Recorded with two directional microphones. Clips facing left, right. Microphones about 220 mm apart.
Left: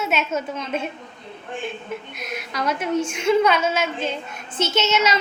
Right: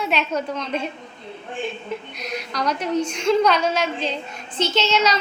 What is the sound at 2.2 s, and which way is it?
Speech, 50° left (ahead or behind).